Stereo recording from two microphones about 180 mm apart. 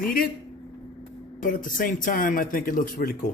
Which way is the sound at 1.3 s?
50° left (ahead or behind).